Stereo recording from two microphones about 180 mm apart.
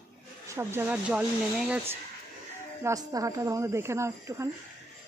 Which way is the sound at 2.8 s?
20° right (ahead or behind).